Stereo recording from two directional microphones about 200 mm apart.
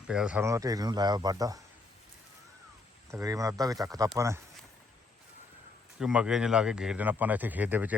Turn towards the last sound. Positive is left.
turn(degrees=-10)  # may be behind; listen again after turning